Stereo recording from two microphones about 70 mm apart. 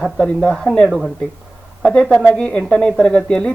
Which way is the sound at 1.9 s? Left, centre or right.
Centre.